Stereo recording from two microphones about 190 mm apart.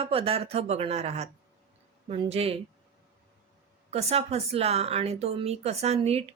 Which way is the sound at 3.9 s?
35° right (ahead or behind).